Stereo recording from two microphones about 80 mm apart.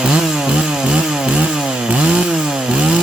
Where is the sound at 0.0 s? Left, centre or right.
Centre.